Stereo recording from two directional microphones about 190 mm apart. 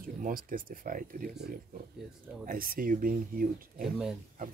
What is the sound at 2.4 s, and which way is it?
Speech, 50° right (ahead or behind).